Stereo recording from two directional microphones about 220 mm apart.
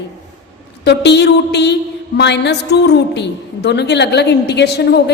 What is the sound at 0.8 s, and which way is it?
A woman's voice, 50° left (ahead or behind).